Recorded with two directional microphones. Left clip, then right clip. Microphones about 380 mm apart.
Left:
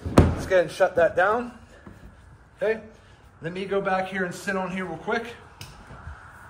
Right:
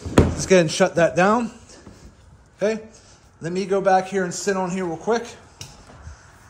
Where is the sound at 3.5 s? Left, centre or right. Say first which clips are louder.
Right 7 dB; centre.